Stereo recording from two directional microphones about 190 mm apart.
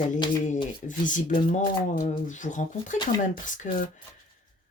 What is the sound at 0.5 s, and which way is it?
Speech, 40° left (ahead or behind).